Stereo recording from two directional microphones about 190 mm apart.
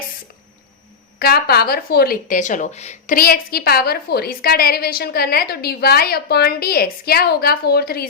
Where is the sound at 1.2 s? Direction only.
55° left (ahead or behind).